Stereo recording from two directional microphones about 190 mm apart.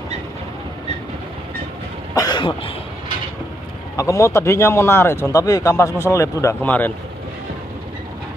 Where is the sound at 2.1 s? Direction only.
20° left (ahead or behind).